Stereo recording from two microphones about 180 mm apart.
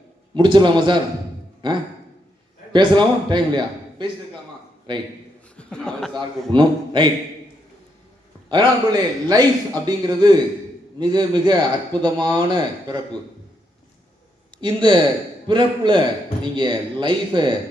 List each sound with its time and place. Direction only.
0.3 s a man's voice: 25° right (ahead or behind)
5.5 s speech: 5° left (ahead or behind)
6.5 s a man's voice: 25° right (ahead or behind)
8.4 s a man's voice: 25° right (ahead or behind)
14.6 s a man's voice: 25° right (ahead or behind)